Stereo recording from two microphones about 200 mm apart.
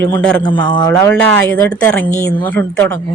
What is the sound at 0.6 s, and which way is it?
Speech, 25° left (ahead or behind).